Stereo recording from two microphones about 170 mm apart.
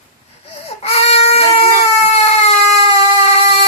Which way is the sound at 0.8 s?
35° left (ahead or behind).